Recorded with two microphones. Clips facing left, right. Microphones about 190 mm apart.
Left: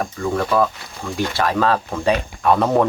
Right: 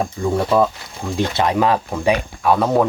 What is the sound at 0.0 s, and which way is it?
Speech, 25° right (ahead or behind).